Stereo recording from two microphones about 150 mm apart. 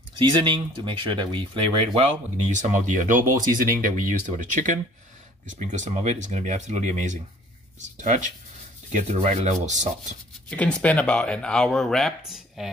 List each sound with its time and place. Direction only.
0.1 s speech: 30° right (ahead or behind)
2.5 s speech: 55° right (ahead or behind)
10.5 s speech: 10° left (ahead or behind)